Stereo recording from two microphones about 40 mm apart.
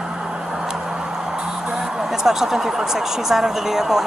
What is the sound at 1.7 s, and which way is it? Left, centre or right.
Speech, centre.